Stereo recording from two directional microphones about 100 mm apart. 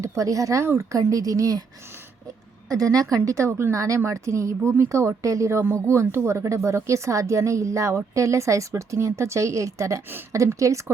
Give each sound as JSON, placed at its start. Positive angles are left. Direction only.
{"t": 0.0, "sound": "speech", "side_deg": -35}
{"t": 2.6, "sound": "speech", "side_deg": -35}